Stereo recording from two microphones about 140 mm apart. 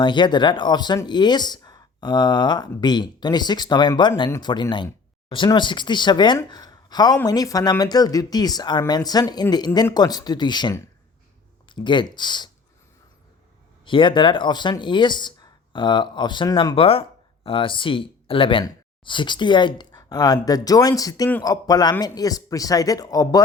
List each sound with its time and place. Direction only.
0.0 s speech: 35° left (ahead or behind)
13.8 s speech: 35° left (ahead or behind)
16.7 s speech: 40° left (ahead or behind); by 23.4 s 25° left (ahead or behind)